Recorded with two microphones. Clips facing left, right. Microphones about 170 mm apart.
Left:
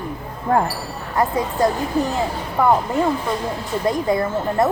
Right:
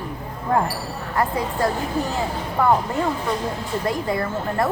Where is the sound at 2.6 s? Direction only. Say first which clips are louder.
Left 2 dB; 15° left (ahead or behind).